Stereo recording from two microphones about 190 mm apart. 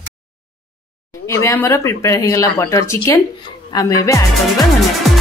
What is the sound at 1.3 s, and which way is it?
Speech, 15° left (ahead or behind).